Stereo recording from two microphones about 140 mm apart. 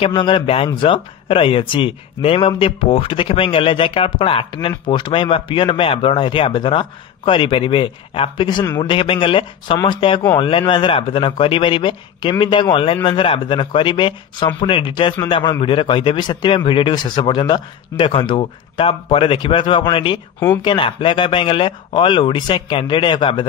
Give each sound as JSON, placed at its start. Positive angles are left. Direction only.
{"t": 0.1, "sound": "speech", "side_deg": 35}